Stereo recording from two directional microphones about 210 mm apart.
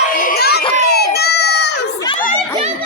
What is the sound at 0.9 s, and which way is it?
Baby cry, 50° left (ahead or behind).